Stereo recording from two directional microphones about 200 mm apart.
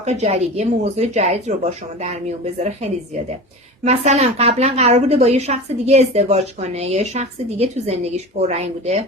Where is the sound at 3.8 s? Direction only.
35° right (ahead or behind).